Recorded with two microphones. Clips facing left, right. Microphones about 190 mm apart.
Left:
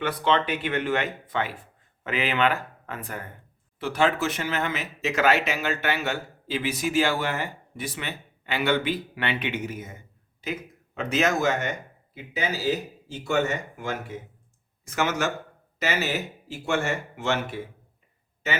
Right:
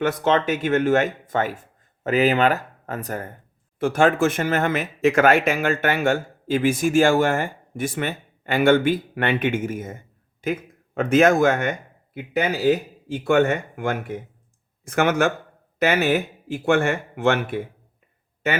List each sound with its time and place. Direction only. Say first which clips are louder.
0.0 s speech: right 4 dB; 45° right (ahead or behind)